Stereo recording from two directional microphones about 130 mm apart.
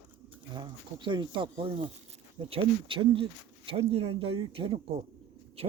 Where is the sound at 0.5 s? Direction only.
40° right (ahead or behind).